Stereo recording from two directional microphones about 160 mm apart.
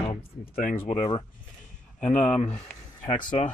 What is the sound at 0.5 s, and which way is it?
Speech, 55° left (ahead or behind).